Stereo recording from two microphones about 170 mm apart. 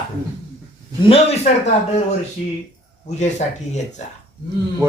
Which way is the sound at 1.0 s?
35° left (ahead or behind).